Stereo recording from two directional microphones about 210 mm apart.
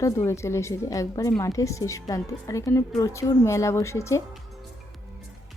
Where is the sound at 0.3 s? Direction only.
15° left (ahead or behind).